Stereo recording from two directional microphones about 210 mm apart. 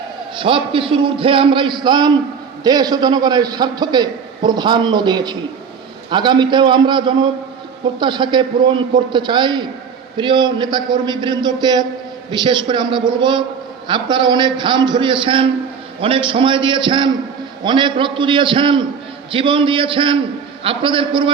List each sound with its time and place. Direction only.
0.3 s a man's voice: 25° right (ahead or behind)